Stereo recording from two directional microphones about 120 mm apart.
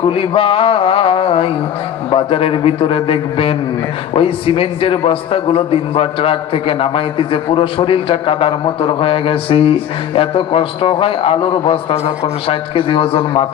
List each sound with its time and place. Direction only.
0.0 s a man's voice: 50° left (ahead or behind)